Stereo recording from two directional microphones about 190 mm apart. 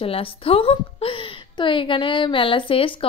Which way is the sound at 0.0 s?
30° left (ahead or behind).